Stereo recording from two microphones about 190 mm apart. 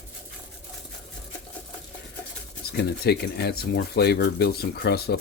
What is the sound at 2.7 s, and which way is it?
Speech, 60° left (ahead or behind).